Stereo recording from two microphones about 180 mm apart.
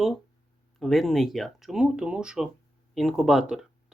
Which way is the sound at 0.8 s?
Centre (ahead or behind).